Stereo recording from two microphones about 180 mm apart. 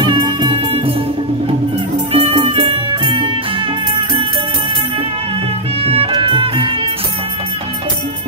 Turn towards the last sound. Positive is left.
turn(degrees=-25)  # may be behind; listen again after turning